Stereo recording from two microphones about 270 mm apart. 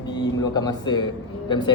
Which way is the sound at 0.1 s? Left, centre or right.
Centre.